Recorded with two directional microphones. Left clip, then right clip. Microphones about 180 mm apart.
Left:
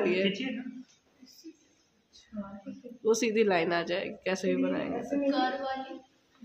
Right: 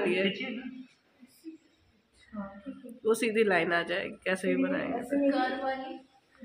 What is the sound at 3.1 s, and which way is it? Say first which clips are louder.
A woman's voice: right 2 dB; 20° left (ahead or behind).